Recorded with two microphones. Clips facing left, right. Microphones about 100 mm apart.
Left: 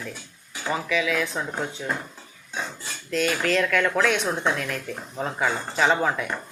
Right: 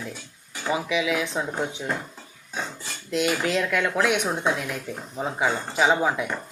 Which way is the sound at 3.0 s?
20° right (ahead or behind).